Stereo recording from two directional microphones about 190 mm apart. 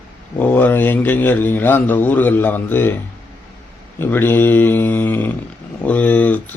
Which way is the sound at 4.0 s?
10° left (ahead or behind).